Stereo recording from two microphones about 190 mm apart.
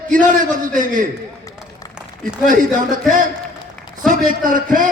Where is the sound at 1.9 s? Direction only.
5° right (ahead or behind).